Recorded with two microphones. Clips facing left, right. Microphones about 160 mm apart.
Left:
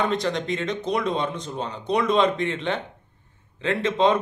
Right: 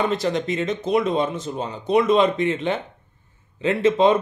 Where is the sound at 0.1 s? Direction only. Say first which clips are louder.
Right 2 dB; 5° right (ahead or behind).